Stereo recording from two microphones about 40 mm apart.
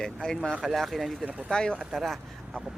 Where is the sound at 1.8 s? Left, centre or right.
Centre.